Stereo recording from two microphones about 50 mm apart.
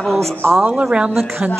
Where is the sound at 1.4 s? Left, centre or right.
Right.